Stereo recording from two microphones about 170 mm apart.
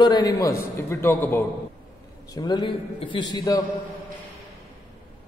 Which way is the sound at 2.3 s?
25° left (ahead or behind).